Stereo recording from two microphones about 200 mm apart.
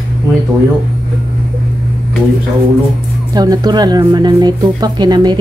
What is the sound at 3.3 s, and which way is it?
Music, 20° right (ahead or behind).